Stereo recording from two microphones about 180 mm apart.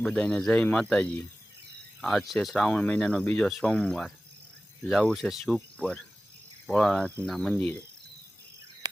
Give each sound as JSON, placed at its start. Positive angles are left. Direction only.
{"t": 0.0, "sound": "speech", "side_deg": 5}